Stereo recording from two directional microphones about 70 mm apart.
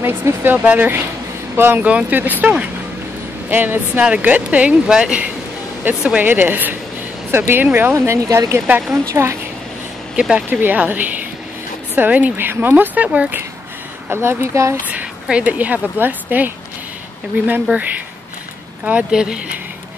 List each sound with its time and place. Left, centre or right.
0.0 s speech: right
1.9 s speech: right
6.2 s speech: right
7.9 s speech: right
8.5 s speech: right
8.9 s speech: right
10.1 s speech: centre
10.6 s speech: right
14.0 s speech: right
14.9 s a woman's voice: centre
18.9 s speech: centre